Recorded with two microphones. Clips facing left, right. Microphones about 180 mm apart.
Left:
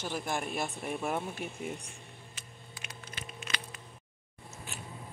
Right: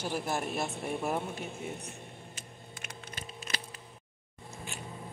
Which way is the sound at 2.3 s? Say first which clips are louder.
Right 3 dB; 40° right (ahead or behind).